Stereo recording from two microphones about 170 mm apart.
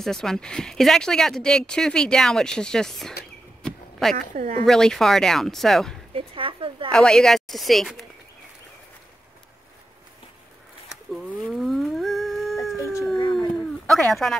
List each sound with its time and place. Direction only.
0.0 s speech: 5° left (ahead or behind)
3.6 s a sound: 5° left (ahead or behind)
4.3 s speech: 40° right (ahead or behind)
4.6 s speech: 5° left (ahead or behind)
6.1 s a sound: 30° right (ahead or behind)
6.9 s speech: 5° left (ahead or behind)
11.1 s howl: centre (ahead or behind)
12.7 s howl: 15° left (ahead or behind)
13.8 s speech: centre (ahead or behind)